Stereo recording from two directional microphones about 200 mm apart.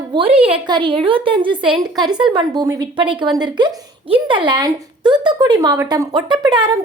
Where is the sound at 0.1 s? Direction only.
25° right (ahead or behind).